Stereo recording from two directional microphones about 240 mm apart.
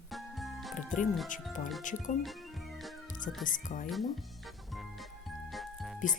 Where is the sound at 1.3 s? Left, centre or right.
Left.